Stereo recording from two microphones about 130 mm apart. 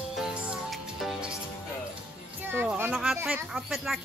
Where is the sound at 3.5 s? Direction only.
Centre (ahead or behind).